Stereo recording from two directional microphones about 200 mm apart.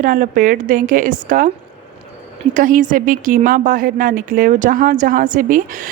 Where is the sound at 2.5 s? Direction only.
40° right (ahead or behind).